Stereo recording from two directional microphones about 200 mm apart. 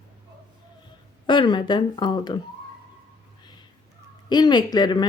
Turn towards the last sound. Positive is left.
turn(degrees=20)  # may be behind; listen again after turning